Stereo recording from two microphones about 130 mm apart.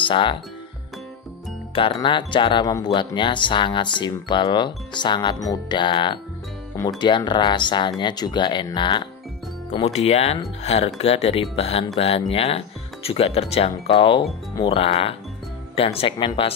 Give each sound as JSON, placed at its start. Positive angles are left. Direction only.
{"t": 0.0, "sound": "speech", "side_deg": 40}
{"t": 1.8, "sound": "speech", "side_deg": 40}
{"t": 9.8, "sound": "speech", "side_deg": 55}